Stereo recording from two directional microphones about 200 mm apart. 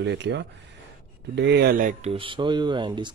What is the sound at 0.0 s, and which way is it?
Speech, 60° right (ahead or behind).